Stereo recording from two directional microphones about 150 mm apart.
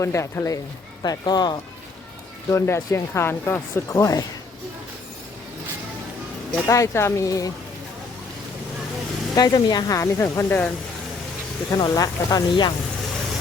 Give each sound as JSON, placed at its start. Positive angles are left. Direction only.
{"t": 0.0, "sound": "speech", "side_deg": 20}
{"t": 2.5, "sound": "speech", "side_deg": 15}
{"t": 6.7, "sound": "speech", "side_deg": 20}
{"t": 9.3, "sound": "speech", "side_deg": 25}
{"t": 11.7, "sound": "speech", "side_deg": 25}